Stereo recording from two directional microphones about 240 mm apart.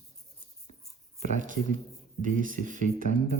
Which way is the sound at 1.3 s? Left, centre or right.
Right.